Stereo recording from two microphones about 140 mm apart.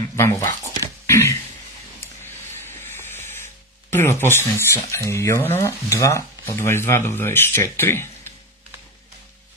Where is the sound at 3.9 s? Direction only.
15° left (ahead or behind).